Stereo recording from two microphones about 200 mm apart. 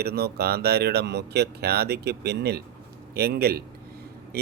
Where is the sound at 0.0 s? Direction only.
50° right (ahead or behind).